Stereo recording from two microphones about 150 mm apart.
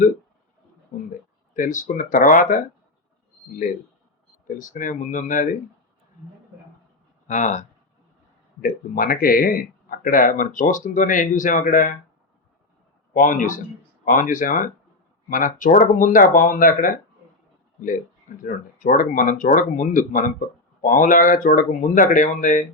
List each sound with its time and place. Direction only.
0.9 s a sound: 55° left (ahead or behind)
1.5 s speech: 60° left (ahead or behind)
4.4 s speech: 60° left (ahead or behind)
7.3 s speech: 55° left (ahead or behind)
8.6 s speech: 70° left (ahead or behind)
13.1 s speech: 60° left (ahead or behind)
18.3 s speech: 65° left (ahead or behind)